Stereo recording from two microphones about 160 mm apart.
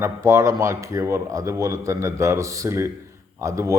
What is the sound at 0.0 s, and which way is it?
A man's voice, 15° right (ahead or behind).